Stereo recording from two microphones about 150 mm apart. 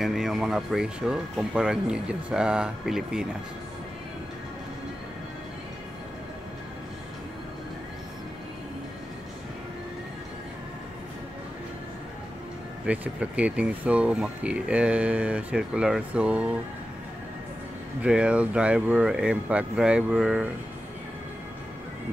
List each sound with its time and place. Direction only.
0.0 s speech: centre (ahead or behind)
12.8 s speech: 10° right (ahead or behind)
18.0 s speech: 5° right (ahead or behind)